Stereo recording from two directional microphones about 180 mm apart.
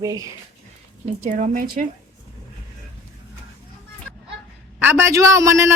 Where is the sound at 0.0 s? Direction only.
20° right (ahead or behind).